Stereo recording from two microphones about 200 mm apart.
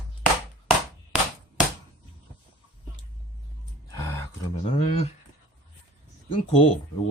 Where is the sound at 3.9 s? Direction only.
20° left (ahead or behind).